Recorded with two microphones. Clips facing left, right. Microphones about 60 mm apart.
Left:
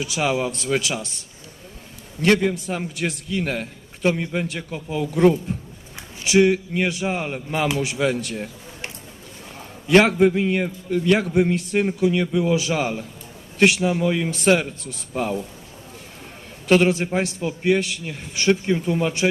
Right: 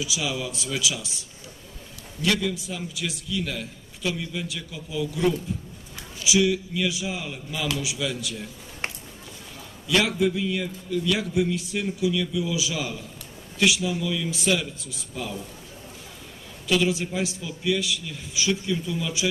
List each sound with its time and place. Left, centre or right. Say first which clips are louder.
0.0 s a man's voice: left 7 dB; left
2.2 s a man's voice: left 7 dB; left
5.5 s a sound: left 3 dB; left
6.2 s a man's voice: left 6 dB; left
9.8 s a man's voice: left 8 dB; left
16.6 s a man's voice: left 6 dB; left